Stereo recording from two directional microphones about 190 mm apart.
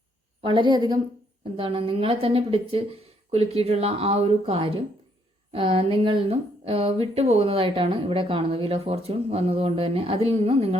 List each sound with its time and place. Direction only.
0.4 s a woman's voice: 25° right (ahead or behind)